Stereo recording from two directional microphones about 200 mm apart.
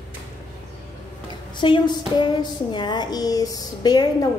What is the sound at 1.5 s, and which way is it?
A woman's voice, 25° left (ahead or behind).